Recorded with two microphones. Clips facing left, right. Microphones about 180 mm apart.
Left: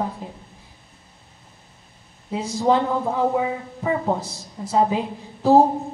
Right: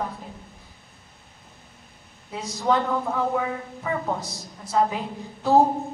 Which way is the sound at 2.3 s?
25° left (ahead or behind).